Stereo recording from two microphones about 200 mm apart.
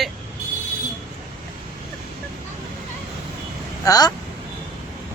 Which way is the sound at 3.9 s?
20° left (ahead or behind).